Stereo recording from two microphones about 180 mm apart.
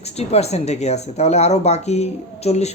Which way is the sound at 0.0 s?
35° left (ahead or behind).